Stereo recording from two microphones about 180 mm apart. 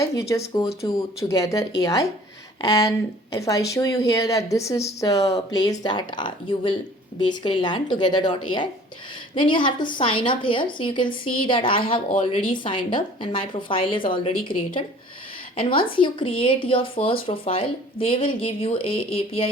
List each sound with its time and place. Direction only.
0.0 s a woman's voice: 15° left (ahead or behind)
15.5 s a woman's voice: 30° left (ahead or behind)